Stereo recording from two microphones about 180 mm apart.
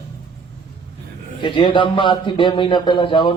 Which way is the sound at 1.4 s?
25° left (ahead or behind).